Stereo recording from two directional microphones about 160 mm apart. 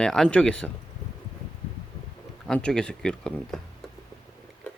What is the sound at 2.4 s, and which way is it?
Speech, 5° left (ahead or behind).